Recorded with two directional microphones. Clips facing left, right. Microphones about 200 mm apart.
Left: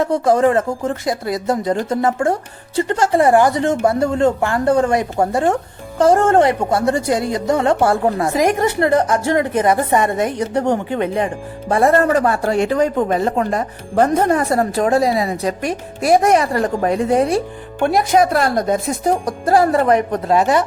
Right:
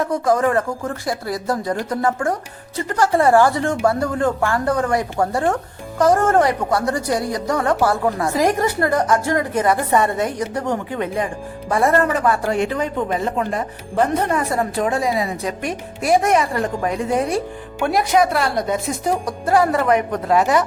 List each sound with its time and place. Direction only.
0.0 s speech: 30° left (ahead or behind)